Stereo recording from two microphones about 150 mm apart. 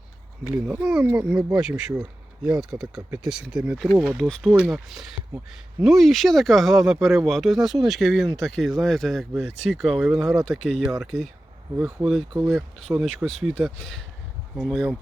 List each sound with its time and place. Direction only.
0.5 s speech: 10° right (ahead or behind)
12.3 s speech: 15° right (ahead or behind)
13.0 s speech: 5° left (ahead or behind)